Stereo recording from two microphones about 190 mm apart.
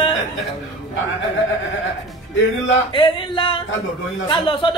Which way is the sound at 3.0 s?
25° left (ahead or behind).